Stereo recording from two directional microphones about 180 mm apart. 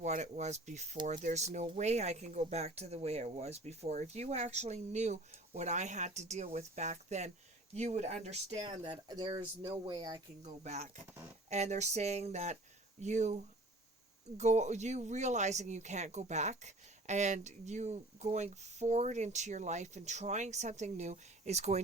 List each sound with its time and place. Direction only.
0.0 s speech: 40° right (ahead or behind)
8.5 s speech: 25° right (ahead or behind)
10.6 s speech: 40° right (ahead or behind)